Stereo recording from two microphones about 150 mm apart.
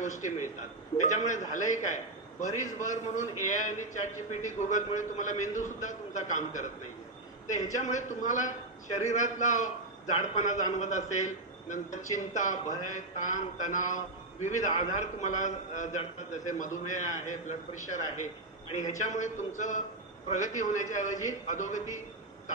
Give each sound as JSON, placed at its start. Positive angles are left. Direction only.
{"t": 0.0, "sound": "a man's voice", "side_deg": 55}